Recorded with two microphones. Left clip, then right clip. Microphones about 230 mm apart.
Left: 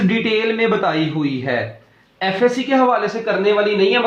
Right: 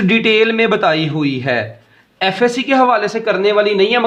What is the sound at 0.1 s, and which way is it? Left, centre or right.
A man's voice, right.